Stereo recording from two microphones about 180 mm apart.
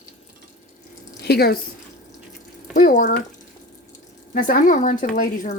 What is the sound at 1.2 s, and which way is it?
Speech, 60° left (ahead or behind).